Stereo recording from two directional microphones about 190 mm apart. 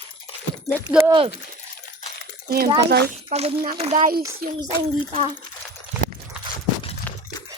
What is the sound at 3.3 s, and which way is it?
Speech, 35° right (ahead or behind).